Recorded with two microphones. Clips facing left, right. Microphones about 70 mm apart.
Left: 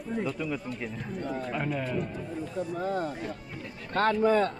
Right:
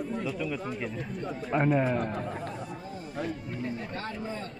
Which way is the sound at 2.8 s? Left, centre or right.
Left.